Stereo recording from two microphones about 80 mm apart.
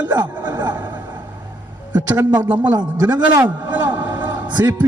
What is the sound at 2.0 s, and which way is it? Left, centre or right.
A man's voice, right.